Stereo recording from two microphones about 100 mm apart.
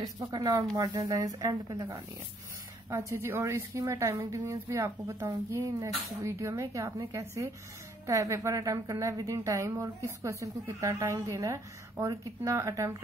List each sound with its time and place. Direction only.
0.2 s a woman's voice: 40° right (ahead or behind)
2.9 s a woman's voice: 25° right (ahead or behind)